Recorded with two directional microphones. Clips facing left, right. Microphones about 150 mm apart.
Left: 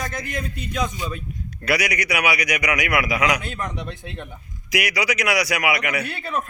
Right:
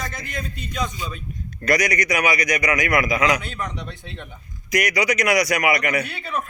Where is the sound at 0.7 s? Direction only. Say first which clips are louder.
Left 2 dB; 50° left (ahead or behind).